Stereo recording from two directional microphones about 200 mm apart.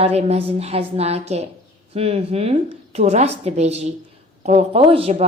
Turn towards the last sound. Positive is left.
turn(degrees=-30)  # may be behind; listen again after turning